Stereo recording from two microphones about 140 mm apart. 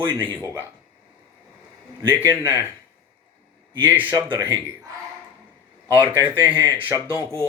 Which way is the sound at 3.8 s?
15° right (ahead or behind).